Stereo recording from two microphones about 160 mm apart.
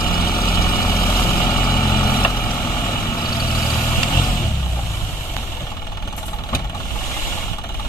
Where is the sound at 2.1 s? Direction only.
10° left (ahead or behind).